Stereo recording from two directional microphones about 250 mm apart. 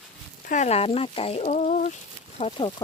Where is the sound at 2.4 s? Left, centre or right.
Centre.